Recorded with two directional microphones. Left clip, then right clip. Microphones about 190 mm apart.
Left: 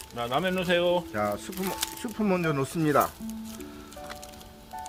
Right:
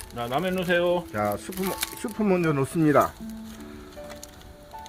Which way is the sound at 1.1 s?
60° right (ahead or behind).